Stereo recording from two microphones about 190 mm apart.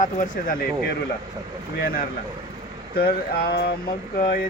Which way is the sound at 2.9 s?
55° left (ahead or behind).